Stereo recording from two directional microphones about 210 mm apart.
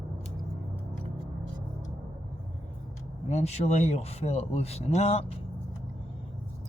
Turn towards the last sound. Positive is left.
turn(degrees=30)  # may be behind; listen again after turning